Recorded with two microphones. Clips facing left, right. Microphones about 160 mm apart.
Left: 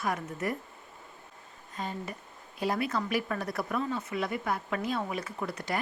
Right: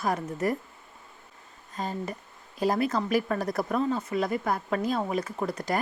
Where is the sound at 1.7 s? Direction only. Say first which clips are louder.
Right 4 dB; 40° right (ahead or behind).